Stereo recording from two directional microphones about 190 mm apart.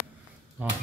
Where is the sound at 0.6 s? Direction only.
5° right (ahead or behind).